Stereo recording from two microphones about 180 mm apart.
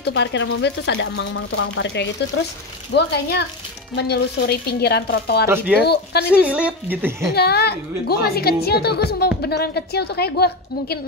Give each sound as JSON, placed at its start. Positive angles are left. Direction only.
{"t": 0.0, "sound": "speech", "side_deg": 70}
{"t": 2.9, "sound": "a woman's voice", "side_deg": 70}
{"t": 5.5, "sound": "speech", "side_deg": -10}
{"t": 5.8, "sound": "a woman's voice", "side_deg": 65}
{"t": 6.4, "sound": "speech", "side_deg": -5}
{"t": 7.3, "sound": "a woman's voice", "side_deg": 65}